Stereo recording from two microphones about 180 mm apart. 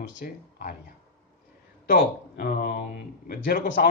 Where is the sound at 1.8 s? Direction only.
55° left (ahead or behind).